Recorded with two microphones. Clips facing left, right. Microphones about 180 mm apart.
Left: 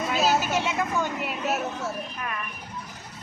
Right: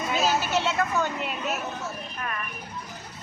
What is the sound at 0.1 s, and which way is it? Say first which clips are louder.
Vehicle: even; 5° left (ahead or behind).